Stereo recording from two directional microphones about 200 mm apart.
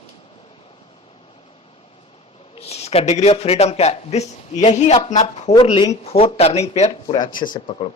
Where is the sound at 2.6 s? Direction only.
30° left (ahead or behind).